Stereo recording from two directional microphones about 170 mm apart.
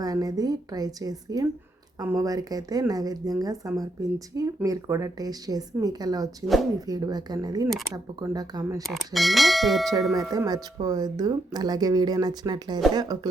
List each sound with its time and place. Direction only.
0.0 s speech: 20° right (ahead or behind)
8.9 s speech: centre (ahead or behind)
10.2 s speech: 20° right (ahead or behind)